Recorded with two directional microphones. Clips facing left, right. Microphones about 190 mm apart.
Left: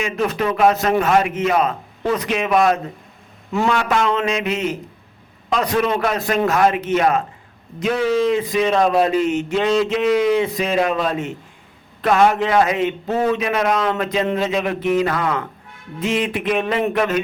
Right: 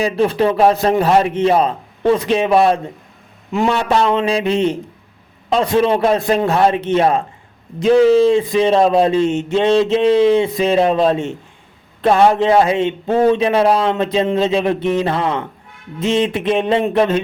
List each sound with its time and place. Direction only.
0.0 s a man's voice: 30° right (ahead or behind)